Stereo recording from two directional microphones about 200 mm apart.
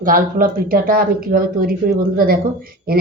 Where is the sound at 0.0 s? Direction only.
45° right (ahead or behind).